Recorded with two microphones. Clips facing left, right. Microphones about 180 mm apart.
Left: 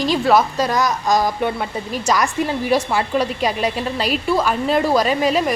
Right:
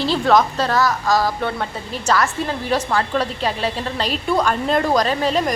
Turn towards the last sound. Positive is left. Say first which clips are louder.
# left 2 dB
turn(degrees=10)  # may be behind; listen again after turning